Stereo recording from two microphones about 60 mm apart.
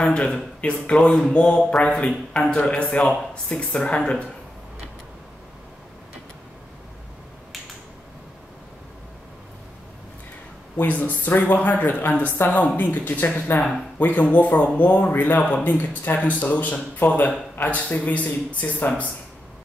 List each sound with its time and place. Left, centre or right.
0.0 s a man's voice: centre
10.9 s speech: left